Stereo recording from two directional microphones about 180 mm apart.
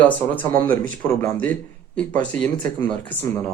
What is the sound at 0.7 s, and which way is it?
Speech, 50° right (ahead or behind).